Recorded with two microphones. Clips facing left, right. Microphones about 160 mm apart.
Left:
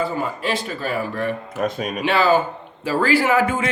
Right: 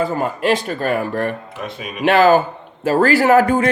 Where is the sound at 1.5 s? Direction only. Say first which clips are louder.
Left 6 dB; 45° left (ahead or behind).